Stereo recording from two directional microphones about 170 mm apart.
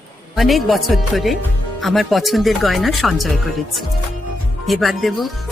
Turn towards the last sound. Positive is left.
turn(degrees=0)  # may be behind; listen again after turning